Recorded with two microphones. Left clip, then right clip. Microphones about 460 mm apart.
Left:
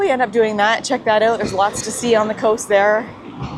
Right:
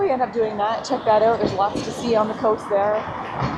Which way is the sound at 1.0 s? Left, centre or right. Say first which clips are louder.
Left 1 dB; centre.